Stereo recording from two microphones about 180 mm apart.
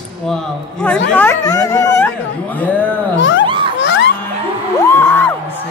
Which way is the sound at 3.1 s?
90° left.